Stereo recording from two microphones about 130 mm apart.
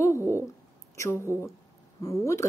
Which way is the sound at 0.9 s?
20° left (ahead or behind).